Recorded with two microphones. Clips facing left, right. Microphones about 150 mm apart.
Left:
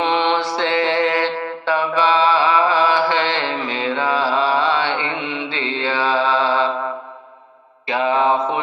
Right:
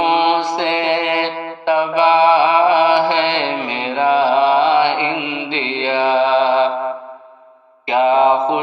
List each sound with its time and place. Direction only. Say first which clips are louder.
0.0 s mantra: right 3 dB; 15° right (ahead or behind)
7.9 s mantra: right 5 dB; 20° right (ahead or behind)